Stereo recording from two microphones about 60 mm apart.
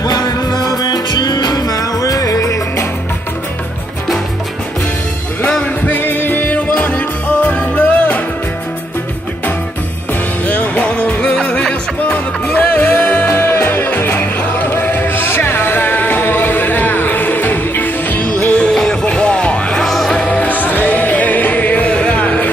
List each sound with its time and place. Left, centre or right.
0.0 s music: left
5.5 s music: centre
5.9 s music: left
10.4 s music: left
13.3 s music: left; by 20.1 s centre
20.1 s music: centre
20.5 s music: left